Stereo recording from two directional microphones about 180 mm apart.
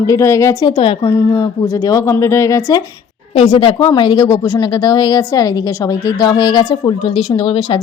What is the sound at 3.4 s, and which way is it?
Speech, 25° left (ahead or behind).